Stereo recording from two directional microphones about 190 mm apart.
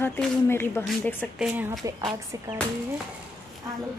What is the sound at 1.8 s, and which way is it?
Speech, 15° right (ahead or behind).